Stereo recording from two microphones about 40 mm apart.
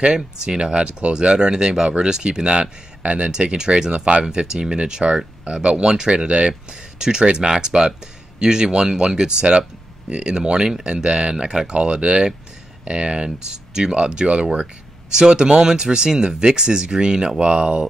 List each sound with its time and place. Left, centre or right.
0.0 s speech: right
3.3 s speech: centre